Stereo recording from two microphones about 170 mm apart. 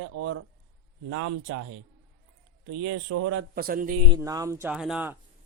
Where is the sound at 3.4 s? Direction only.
65° right (ahead or behind).